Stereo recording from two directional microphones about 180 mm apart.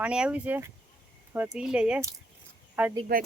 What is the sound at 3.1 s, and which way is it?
Speech, 55° right (ahead or behind).